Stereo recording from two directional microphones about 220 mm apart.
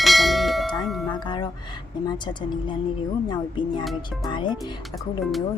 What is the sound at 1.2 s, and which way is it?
Speech, 20° left (ahead or behind).